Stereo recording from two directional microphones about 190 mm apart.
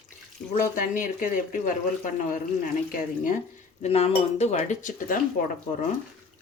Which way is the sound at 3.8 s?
35° left (ahead or behind).